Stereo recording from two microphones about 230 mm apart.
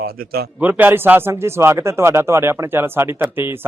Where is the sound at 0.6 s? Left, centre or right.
Centre.